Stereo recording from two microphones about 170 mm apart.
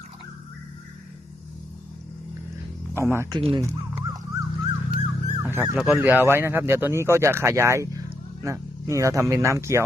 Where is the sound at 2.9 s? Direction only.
15° right (ahead or behind).